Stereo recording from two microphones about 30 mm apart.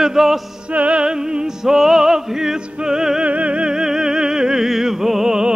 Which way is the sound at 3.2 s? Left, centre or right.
Right.